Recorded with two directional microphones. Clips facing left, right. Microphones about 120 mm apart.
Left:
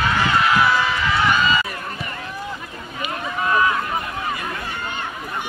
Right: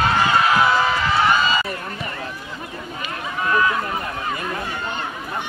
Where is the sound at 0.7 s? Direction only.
35° right (ahead or behind).